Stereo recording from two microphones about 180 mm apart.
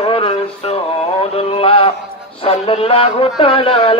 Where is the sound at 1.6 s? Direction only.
30° left (ahead or behind).